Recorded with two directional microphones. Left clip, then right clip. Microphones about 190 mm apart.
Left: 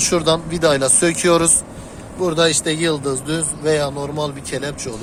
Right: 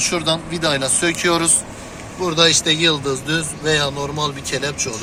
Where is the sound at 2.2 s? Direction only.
45° left (ahead or behind); by 3.8 s 25° left (ahead or behind).